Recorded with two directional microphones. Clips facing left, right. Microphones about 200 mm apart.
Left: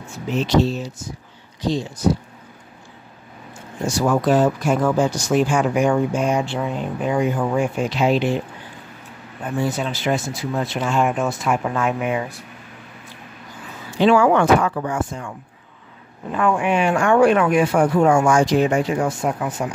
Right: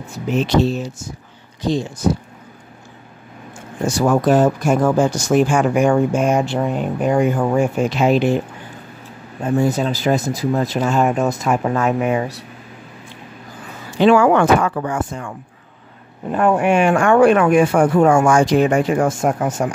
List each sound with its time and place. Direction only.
0.3 s speech: 55° right (ahead or behind)
3.8 s speech: 50° right (ahead or behind)
9.6 s speech: 40° right (ahead or behind)
14.0 s speech: 50° right (ahead or behind)
16.3 s speech: 45° right (ahead or behind)